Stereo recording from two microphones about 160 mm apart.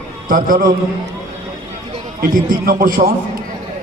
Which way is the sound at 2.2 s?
65° right (ahead or behind).